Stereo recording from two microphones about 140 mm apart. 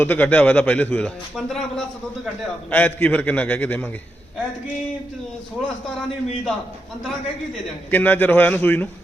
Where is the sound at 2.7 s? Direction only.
10° left (ahead or behind).